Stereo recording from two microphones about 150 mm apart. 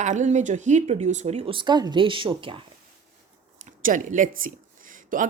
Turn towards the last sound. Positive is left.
turn(degrees=-65)  # may be behind; listen again after turning